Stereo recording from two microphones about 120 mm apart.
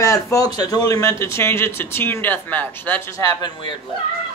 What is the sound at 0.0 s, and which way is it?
Speech, 25° left (ahead or behind).